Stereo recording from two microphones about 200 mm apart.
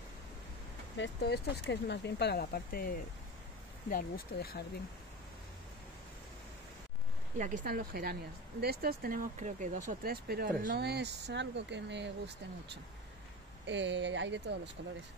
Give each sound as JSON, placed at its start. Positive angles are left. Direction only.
{"t": 0.9, "sound": "speech", "side_deg": 60}
{"t": 7.3, "sound": "speech", "side_deg": -40}
{"t": 13.7, "sound": "speech", "side_deg": -65}